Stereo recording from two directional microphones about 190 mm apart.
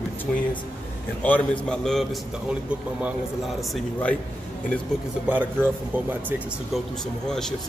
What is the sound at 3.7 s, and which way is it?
Speech, 5° left (ahead or behind).